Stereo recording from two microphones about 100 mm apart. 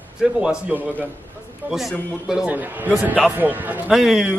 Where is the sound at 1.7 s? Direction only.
5° right (ahead or behind).